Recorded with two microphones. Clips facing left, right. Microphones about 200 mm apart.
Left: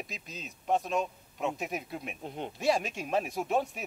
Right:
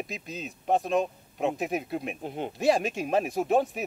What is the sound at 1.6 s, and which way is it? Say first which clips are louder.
Speech: right 6 dB; centre (ahead or behind).